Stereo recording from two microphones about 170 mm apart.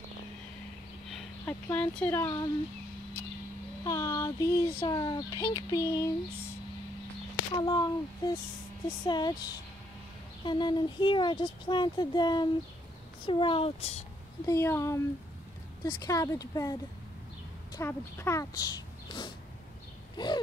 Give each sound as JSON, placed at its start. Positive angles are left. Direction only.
{"t": 1.4, "sound": "speech", "side_deg": 10}
{"t": 2.2, "sound": "speech", "side_deg": 20}
{"t": 3.8, "sound": "speech", "side_deg": 20}
{"t": 7.5, "sound": "speech", "side_deg": 25}
{"t": 14.4, "sound": "speech", "side_deg": 15}
{"t": 17.7, "sound": "speech", "side_deg": 15}